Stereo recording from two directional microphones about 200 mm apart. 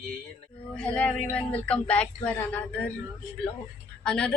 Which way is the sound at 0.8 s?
5° left (ahead or behind).